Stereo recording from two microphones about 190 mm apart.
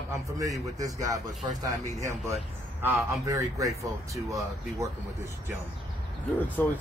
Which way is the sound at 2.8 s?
15° right (ahead or behind).